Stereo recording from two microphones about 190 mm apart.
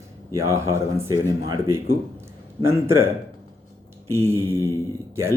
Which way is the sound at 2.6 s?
15° right (ahead or behind).